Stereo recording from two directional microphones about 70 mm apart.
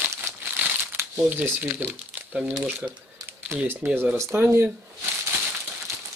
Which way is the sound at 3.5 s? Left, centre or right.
Right.